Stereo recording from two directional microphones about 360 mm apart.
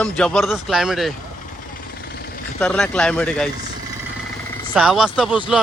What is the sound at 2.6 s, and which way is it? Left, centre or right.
Speech, centre.